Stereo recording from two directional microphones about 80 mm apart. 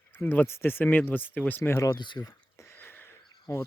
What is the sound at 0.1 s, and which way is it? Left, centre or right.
Speech, left.